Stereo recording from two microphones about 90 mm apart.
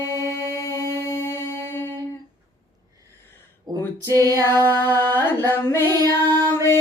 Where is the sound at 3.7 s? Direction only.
45° right (ahead or behind).